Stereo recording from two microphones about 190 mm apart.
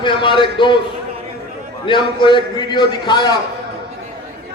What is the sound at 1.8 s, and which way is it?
A man's voice, 25° left (ahead or behind).